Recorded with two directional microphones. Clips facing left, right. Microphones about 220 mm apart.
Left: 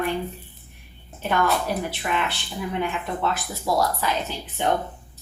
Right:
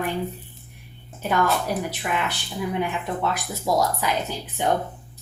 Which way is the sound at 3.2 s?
15° right (ahead or behind).